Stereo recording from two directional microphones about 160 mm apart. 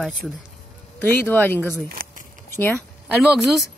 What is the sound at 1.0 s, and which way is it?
Speech, 10° left (ahead or behind).